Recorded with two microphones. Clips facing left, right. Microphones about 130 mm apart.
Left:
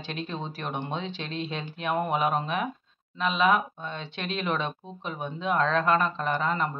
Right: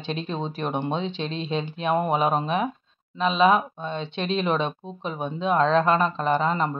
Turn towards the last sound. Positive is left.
turn(degrees=-25)  # may be behind; listen again after turning